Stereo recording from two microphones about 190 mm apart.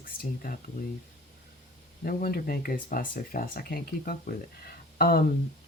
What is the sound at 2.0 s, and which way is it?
Speech, 50° left (ahead or behind).